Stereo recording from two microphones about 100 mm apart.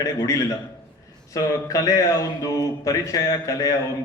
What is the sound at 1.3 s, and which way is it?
A man's voice, 35° left (ahead or behind).